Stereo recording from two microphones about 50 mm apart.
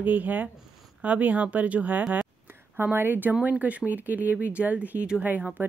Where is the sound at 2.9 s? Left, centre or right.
Right.